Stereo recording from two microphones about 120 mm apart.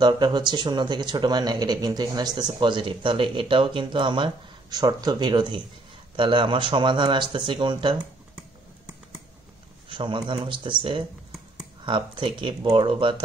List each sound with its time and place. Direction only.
0.0 s speech: 35° right (ahead or behind)
9.8 s speech: 40° right (ahead or behind)